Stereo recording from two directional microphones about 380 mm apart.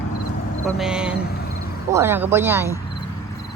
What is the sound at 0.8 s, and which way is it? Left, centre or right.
A woman's voice, centre.